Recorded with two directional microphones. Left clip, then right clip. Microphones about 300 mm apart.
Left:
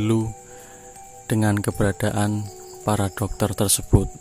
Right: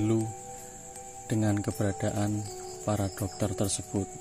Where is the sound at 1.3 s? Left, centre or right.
Left.